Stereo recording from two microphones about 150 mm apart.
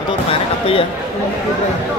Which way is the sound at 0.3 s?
35° left (ahead or behind).